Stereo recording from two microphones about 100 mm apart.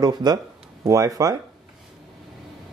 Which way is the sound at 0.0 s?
40° right (ahead or behind).